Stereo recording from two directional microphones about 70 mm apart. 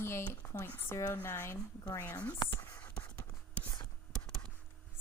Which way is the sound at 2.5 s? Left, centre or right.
Left.